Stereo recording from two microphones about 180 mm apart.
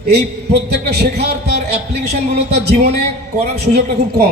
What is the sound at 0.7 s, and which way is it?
A man's voice, 60° right (ahead or behind).